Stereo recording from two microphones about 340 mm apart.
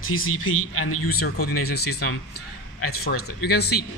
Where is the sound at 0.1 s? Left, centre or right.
Left.